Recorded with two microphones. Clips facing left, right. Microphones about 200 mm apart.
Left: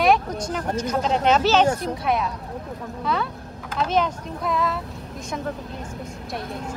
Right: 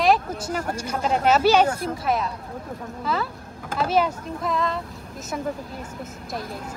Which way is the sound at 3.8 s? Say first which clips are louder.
Right 1 dB; 5° right (ahead or behind).